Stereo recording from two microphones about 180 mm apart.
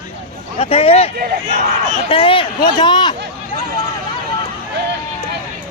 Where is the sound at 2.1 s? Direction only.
30° left (ahead or behind).